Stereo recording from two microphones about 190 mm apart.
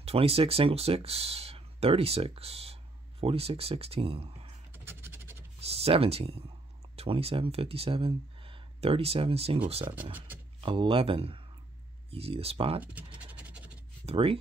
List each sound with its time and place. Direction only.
0.0 s speech: 30° right (ahead or behind)
4.8 s scratch: 10° right (ahead or behind)
5.6 s speech: 30° right (ahead or behind)
10.1 s speech: 10° right (ahead or behind)
10.6 s speech: 25° right (ahead or behind)
13.2 s scratch: 5° right (ahead or behind)
14.0 s speech: 30° right (ahead or behind)